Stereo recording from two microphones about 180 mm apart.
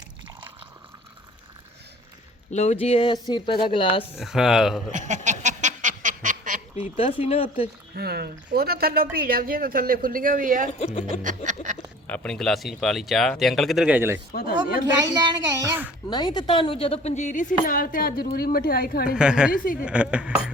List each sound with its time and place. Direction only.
2.5 s speech: 40° left (ahead or behind)
4.1 s speech: centre (ahead or behind)
4.9 s a sound: 40° right (ahead or behind)
6.9 s speech: 30° left (ahead or behind)
7.9 s speech: 60° right (ahead or behind)
10.8 s speech: 35° left (ahead or behind)
11.0 s a sound: 45° right (ahead or behind)
12.0 s speech: 5° left (ahead or behind); by 14.2 s 10° right (ahead or behind)
15.0 s a child's voice: 20° right (ahead or behind)
16.0 s a woman's voice: 25° left (ahead or behind); by 19.1 s 55° left (ahead or behind)
19.1 s speech: 5° right (ahead or behind)